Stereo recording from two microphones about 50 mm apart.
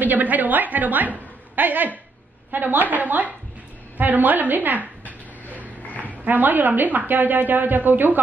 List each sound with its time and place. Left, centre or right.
0.0 s a woman's voice: right
5.6 s a sound: left
6.0 s a woman's voice: right